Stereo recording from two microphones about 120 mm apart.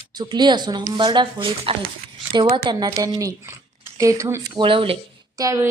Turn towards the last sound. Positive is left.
turn(degrees=-25)  # may be behind; listen again after turning